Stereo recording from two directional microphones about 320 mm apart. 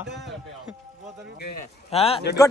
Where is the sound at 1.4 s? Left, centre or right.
Left.